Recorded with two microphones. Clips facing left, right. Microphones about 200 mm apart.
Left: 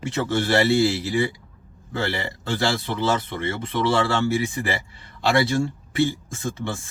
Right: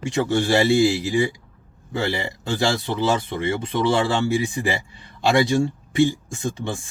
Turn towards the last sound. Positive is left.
turn(degrees=-15)  # may be behind; listen again after turning